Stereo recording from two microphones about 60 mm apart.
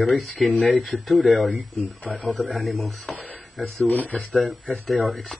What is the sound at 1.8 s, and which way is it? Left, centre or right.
Speech, left.